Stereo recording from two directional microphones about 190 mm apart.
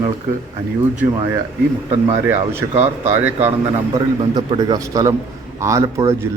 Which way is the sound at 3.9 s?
20° right (ahead or behind).